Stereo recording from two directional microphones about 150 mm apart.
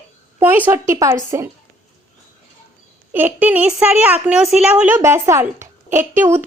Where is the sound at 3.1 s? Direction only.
10° right (ahead or behind).